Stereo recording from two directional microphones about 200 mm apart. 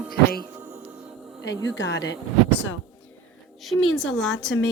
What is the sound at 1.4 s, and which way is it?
Speech, 60° left (ahead or behind).